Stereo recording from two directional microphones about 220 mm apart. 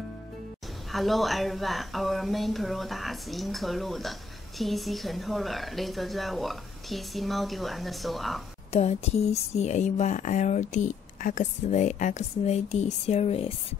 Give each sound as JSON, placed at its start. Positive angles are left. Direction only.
{"t": 0.9, "sound": "speech", "side_deg": 0}
{"t": 8.7, "sound": "speech", "side_deg": 30}